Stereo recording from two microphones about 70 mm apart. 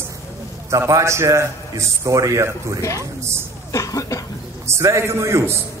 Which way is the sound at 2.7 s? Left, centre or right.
Left.